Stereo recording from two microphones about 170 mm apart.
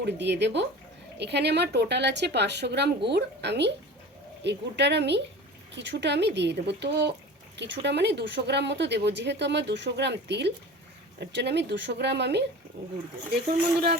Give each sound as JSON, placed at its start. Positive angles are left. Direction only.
{"t": 0.0, "sound": "speech", "side_deg": -90}